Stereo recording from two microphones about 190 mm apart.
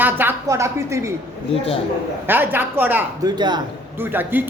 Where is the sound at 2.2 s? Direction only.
10° right (ahead or behind).